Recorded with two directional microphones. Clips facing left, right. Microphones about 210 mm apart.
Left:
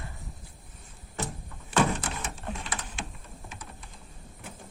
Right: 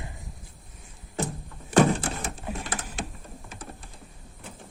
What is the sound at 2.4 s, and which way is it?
Printer, 5° right (ahead or behind).